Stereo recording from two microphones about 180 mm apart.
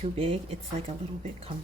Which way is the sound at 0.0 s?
35° right (ahead or behind).